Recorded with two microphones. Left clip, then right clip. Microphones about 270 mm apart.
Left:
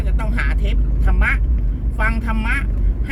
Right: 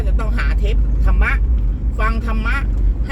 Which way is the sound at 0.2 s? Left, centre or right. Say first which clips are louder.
Left 1 dB; centre.